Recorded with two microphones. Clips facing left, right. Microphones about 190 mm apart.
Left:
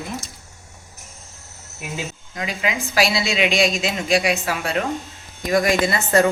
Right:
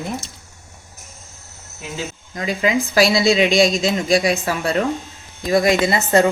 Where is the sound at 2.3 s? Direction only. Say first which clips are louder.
Right 6 dB; 40° right (ahead or behind).